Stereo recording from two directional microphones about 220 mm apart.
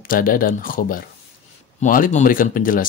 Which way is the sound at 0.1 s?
40° left (ahead or behind).